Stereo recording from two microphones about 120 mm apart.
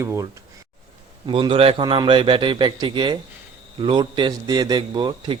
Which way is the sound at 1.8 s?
40° right (ahead or behind).